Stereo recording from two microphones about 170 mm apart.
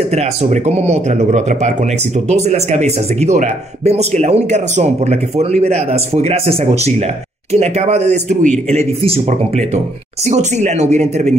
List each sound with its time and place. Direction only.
0.1 s speech: 40° right (ahead or behind)